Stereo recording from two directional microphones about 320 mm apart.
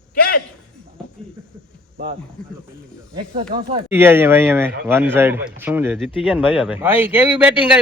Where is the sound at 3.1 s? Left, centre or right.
Centre.